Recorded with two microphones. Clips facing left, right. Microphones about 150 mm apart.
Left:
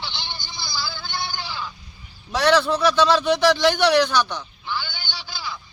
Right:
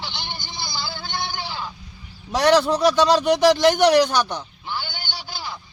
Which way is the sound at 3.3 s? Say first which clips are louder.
Right 2 dB; 45° right (ahead or behind).